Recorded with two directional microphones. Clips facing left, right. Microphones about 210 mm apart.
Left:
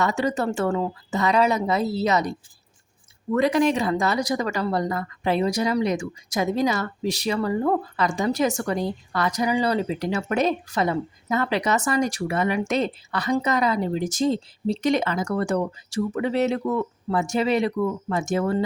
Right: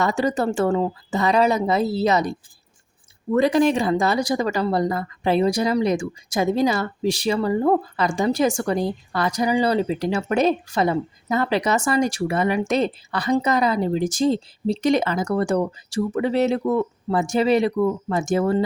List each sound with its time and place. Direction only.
0.0 s speech: 35° right (ahead or behind)
3.3 s speech: 30° right (ahead or behind)